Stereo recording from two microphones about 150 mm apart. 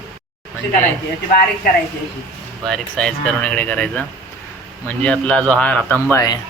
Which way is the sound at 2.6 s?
5° left (ahead or behind).